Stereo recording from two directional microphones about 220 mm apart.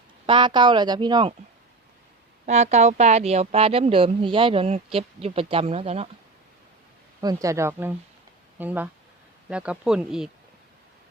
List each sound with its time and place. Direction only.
0.3 s speech: 20° right (ahead or behind)
2.5 s speech: 30° right (ahead or behind)
7.2 s speech: 15° right (ahead or behind)